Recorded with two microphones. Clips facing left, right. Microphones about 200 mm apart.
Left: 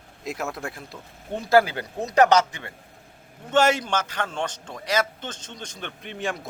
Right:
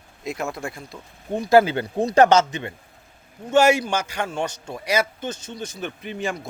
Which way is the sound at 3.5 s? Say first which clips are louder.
Right 3 dB; 10° right (ahead or behind).